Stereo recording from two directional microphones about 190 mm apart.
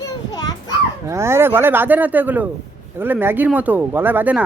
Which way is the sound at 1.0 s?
15° right (ahead or behind).